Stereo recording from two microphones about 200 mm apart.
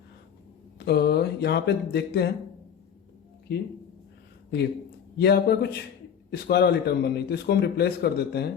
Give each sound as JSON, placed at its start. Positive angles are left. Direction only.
{"t": 0.9, "sound": "a man's voice", "side_deg": 55}
{"t": 5.1, "sound": "a man's voice", "side_deg": 55}